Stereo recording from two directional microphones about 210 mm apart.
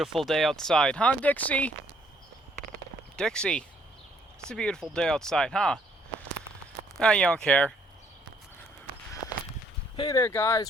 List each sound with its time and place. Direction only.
0.0 s speech: centre (ahead or behind)
3.2 s speech: 5° left (ahead or behind)
6.9 s speech: 5° left (ahead or behind)
9.9 s speech: 20° left (ahead or behind)